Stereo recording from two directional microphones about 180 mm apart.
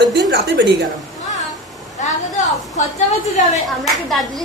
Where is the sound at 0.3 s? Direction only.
70° right (ahead or behind).